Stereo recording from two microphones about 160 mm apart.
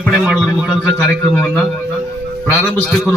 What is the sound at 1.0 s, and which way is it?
A man's voice, 10° left (ahead or behind).